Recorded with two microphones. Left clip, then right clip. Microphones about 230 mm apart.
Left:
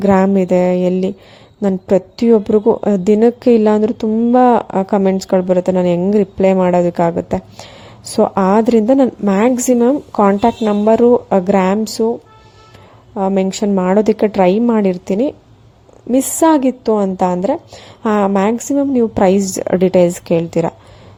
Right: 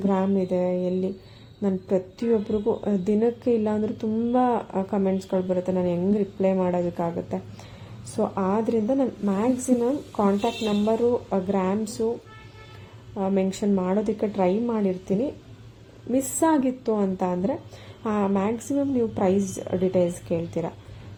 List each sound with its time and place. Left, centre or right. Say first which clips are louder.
0.0 s a woman's voice: left 12 dB; left
13.1 s a woman's voice: left 10 dB; left